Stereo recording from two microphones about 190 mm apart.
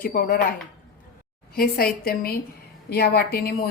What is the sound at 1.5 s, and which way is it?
A woman's voice, 50° left (ahead or behind).